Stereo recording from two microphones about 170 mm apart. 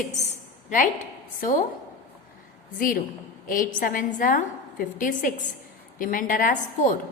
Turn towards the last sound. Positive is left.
turn(degrees=50)  # may be behind; listen again after turning